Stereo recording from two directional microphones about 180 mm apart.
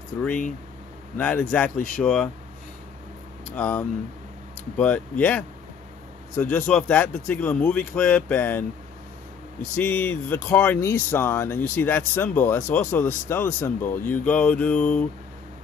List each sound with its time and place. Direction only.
1.1 s speech: 10° left (ahead or behind)
3.5 s speech: 5° left (ahead or behind)
9.8 s speech: 10° left (ahead or behind)